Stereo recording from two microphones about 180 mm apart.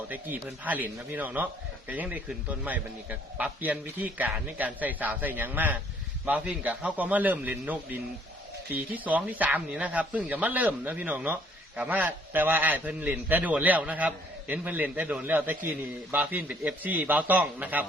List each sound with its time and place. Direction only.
0.1 s a man's voice: 10° right (ahead or behind)